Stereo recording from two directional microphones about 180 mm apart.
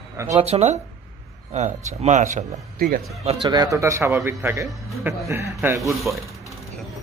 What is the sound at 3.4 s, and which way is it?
A man's voice, 20° right (ahead or behind).